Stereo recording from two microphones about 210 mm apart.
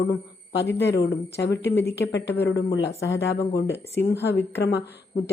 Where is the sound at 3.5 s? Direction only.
50° left (ahead or behind).